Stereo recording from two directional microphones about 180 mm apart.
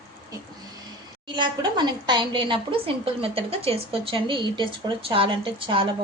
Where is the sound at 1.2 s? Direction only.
25° right (ahead or behind).